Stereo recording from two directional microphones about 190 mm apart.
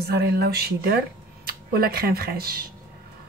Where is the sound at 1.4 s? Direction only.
55° right (ahead or behind).